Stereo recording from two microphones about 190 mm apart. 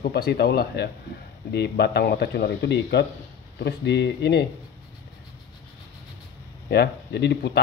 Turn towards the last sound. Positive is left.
turn(degrees=60)  # may be behind; listen again after turning